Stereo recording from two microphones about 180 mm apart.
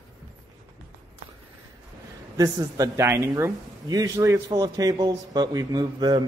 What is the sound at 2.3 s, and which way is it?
Speech, 20° right (ahead or behind).